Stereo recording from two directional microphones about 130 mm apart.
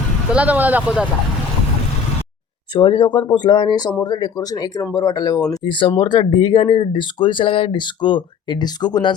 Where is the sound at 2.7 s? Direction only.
40° left (ahead or behind).